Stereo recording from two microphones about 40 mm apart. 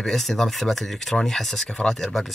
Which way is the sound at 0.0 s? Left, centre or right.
Centre.